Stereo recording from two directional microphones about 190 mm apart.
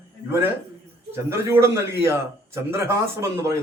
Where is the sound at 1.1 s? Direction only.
15° right (ahead or behind).